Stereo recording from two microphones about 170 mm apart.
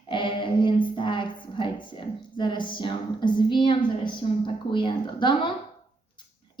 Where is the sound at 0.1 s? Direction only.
30° left (ahead or behind).